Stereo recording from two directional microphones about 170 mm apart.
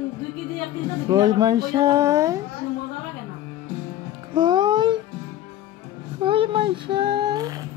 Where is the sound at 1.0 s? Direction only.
20° right (ahead or behind).